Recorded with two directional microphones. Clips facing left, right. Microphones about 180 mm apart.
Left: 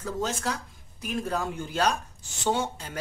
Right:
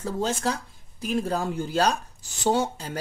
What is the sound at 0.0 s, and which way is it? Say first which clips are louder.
Speech: right 3 dB; 30° right (ahead or behind).